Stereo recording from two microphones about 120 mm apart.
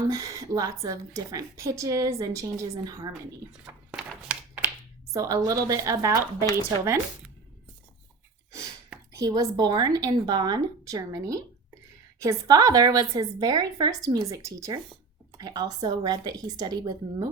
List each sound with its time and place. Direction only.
0.0 s a woman's voice: 30° right (ahead or behind)
3.9 s a sound: 10° right (ahead or behind)
5.1 s a woman's voice: 30° right (ahead or behind)
9.1 s a woman's voice: 30° right (ahead or behind)